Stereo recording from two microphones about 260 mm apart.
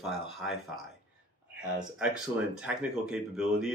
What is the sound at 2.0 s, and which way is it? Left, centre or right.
Speech, centre.